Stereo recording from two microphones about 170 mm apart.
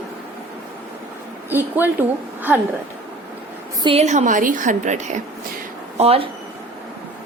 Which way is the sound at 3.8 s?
35° right (ahead or behind).